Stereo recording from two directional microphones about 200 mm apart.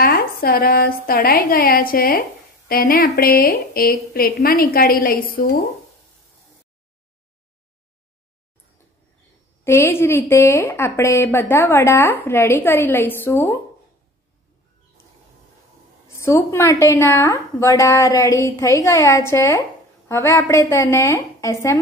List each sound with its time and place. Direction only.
0.0 s a woman's voice: 50° left (ahead or behind)
9.7 s a woman's voice: 10° left (ahead or behind)
16.2 s a woman's voice: 15° left (ahead or behind)